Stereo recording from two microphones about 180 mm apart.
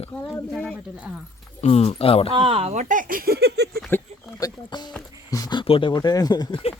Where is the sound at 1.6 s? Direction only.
35° left (ahead or behind).